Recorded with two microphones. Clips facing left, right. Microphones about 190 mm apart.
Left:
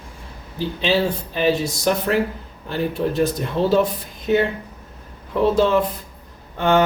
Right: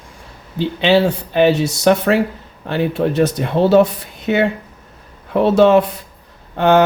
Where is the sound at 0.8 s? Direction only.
70° right (ahead or behind).